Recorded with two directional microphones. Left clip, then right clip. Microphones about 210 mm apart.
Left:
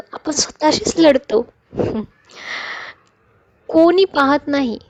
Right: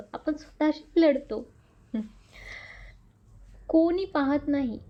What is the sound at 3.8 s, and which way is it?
A woman's voice, 45° left (ahead or behind).